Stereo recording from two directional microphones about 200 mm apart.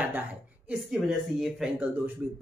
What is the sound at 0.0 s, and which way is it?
A man's voice, 10° right (ahead or behind).